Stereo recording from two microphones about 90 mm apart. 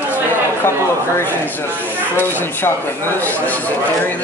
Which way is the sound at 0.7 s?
25° left (ahead or behind).